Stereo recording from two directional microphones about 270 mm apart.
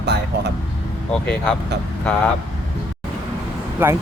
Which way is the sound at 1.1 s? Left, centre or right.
Centre.